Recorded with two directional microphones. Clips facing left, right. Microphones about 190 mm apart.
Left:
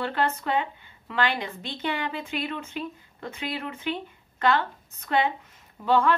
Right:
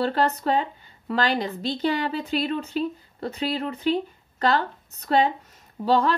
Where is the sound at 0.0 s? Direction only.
40° right (ahead or behind).